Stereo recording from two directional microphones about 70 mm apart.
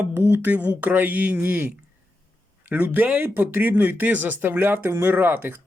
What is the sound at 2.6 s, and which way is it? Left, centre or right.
Speech, right.